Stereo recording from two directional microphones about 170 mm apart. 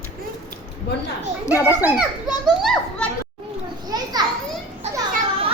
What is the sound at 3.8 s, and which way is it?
Children playing, 25° right (ahead or behind).